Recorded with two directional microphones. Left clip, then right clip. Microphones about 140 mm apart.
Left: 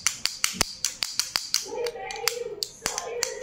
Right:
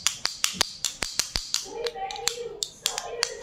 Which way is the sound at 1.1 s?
15° right (ahead or behind).